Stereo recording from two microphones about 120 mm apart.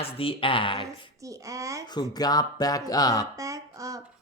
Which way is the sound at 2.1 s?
35° left (ahead or behind).